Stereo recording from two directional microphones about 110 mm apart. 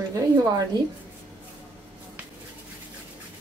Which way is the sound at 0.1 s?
35° right (ahead or behind).